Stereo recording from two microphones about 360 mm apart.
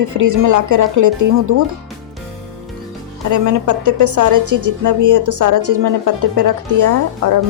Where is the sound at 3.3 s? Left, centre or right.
Right.